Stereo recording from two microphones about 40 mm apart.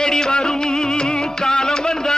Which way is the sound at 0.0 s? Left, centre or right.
Centre.